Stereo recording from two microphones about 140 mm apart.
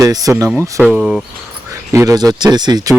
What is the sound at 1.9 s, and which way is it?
Speech, 25° right (ahead or behind).